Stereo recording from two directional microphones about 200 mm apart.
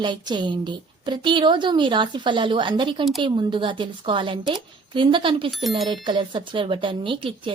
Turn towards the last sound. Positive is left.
turn(degrees=-25)  # may be behind; listen again after turning